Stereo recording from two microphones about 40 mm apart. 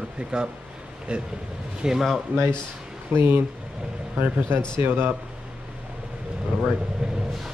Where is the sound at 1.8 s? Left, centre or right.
Centre.